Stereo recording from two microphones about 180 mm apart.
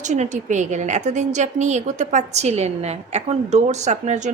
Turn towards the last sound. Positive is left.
turn(degrees=-40)  # may be behind; listen again after turning